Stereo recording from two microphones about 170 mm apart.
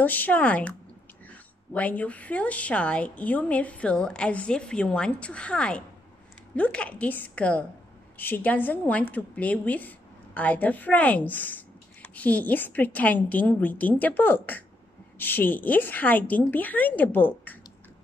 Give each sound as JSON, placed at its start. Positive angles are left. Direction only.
{"t": 0.0, "sound": "a woman's voice", "side_deg": 10}